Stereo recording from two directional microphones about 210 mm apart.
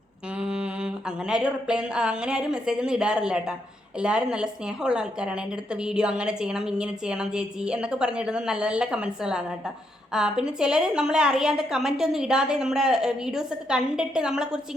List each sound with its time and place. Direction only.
0.3 s humming: 5° right (ahead or behind)
1.3 s a woman's voice: 5° right (ahead or behind)